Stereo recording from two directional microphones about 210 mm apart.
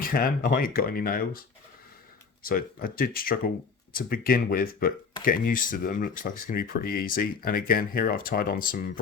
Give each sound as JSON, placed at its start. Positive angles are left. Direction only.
{"t": 0.0, "sound": "speech", "side_deg": 45}
{"t": 2.5, "sound": "speech", "side_deg": 45}